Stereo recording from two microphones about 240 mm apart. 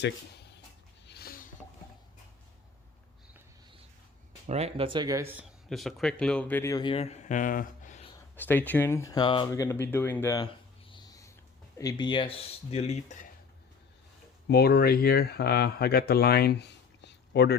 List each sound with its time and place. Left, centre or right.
0.0 s a sound: left
4.4 s speech: right; by 8.1 s left
8.4 s speech: centre; by 13.1 s left
14.4 s speech: left